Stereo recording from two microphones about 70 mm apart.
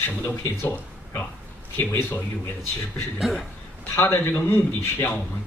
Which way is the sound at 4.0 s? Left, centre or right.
Left.